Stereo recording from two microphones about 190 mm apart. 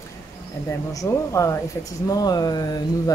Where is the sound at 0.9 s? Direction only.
15° left (ahead or behind).